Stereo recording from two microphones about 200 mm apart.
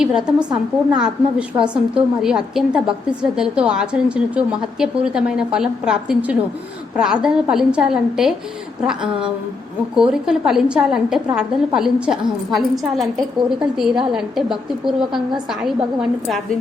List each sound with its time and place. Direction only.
0.0 s a woman's voice: 5° right (ahead or behind)